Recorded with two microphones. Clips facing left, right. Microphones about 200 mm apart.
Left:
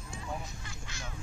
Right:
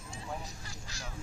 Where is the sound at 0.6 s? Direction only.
35° right (ahead or behind).